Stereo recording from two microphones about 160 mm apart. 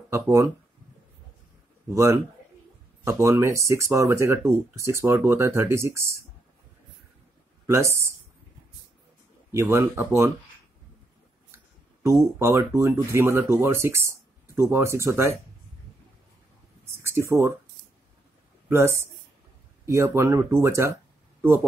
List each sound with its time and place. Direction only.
0.1 s speech: 20° right (ahead or behind)
1.9 s speech: 15° right (ahead or behind)
7.6 s speech: 20° right (ahead or behind)
9.5 s speech: 15° right (ahead or behind)
11.5 s speech: 15° right (ahead or behind)
16.8 s speech: 15° right (ahead or behind)
18.7 s speech: 15° right (ahead or behind)